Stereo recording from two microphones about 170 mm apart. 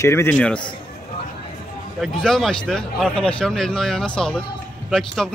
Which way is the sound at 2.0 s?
Centre (ahead or behind).